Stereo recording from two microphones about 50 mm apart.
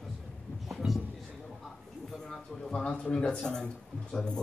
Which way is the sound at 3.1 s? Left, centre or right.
Centre.